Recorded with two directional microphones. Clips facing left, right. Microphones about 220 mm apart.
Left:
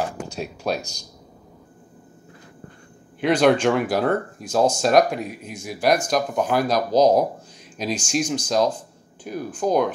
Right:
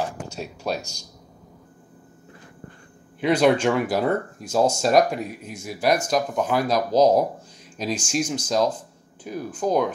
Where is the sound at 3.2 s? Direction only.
5° right (ahead or behind).